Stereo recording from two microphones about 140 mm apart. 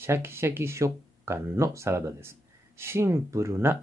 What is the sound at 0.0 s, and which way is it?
Speech, 20° right (ahead or behind).